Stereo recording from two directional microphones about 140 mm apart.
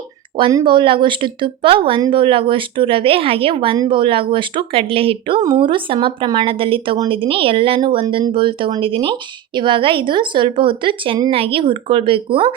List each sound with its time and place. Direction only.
0.5 s speech: 35° right (ahead or behind)